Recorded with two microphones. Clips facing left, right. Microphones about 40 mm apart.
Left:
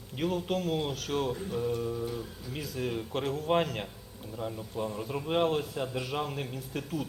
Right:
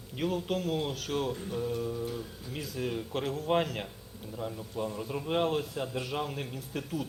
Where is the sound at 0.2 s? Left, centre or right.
Centre.